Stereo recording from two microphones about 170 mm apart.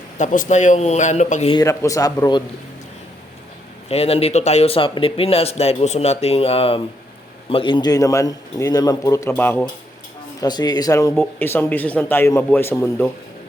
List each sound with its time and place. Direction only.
0.2 s speech: 45° left (ahead or behind)
1.5 s speech: 20° left (ahead or behind)
3.8 s speech: 35° left (ahead or behind); by 9.6 s 10° left (ahead or behind)
10.4 s speech: 25° left (ahead or behind)